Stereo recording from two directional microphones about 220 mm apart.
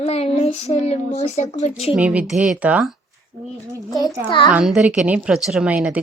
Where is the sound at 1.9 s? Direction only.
5° right (ahead or behind).